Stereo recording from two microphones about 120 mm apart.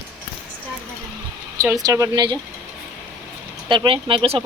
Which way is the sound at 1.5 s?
25° right (ahead or behind).